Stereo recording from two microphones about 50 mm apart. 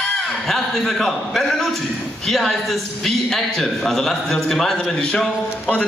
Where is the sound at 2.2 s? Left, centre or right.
Centre.